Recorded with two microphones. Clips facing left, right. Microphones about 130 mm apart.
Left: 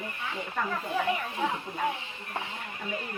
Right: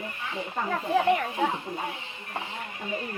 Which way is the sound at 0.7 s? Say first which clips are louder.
Right 8 dB; 65° right (ahead or behind).